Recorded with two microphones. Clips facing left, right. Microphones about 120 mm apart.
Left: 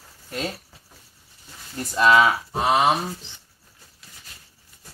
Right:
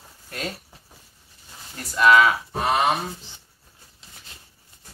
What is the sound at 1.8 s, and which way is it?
Speech, 25° left (ahead or behind).